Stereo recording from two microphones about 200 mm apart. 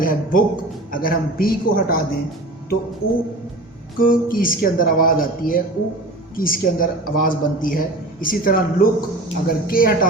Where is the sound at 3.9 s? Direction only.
45° left (ahead or behind).